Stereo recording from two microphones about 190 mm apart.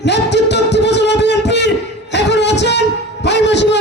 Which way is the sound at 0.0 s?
65° left (ahead or behind).